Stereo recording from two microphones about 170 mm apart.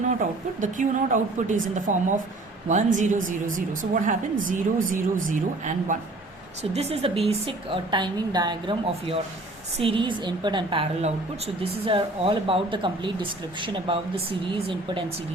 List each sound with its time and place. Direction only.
0.6 s a woman's voice: 50° right (ahead or behind)
6.6 s a woman's voice: 35° right (ahead or behind)